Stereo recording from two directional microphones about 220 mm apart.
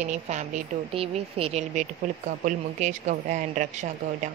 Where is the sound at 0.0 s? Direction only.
30° right (ahead or behind).